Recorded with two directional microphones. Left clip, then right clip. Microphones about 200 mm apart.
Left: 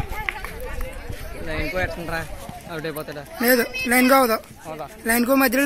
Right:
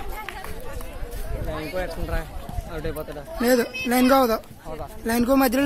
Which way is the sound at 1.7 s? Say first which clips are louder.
Left 4 dB; 45° left (ahead or behind).